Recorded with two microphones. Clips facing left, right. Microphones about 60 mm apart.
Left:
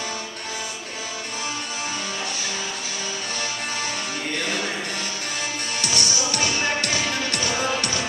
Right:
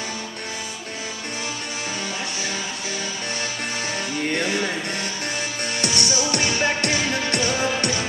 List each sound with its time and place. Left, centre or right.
5.8 s music: right
6.9 s music: right